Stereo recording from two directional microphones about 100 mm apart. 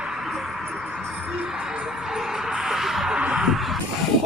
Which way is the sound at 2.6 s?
5° right (ahead or behind).